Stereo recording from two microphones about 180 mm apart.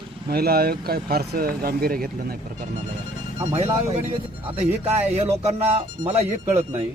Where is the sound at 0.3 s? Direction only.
60° right (ahead or behind).